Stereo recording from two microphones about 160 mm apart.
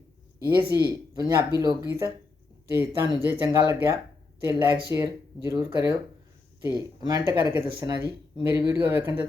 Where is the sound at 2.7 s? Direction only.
15° right (ahead or behind).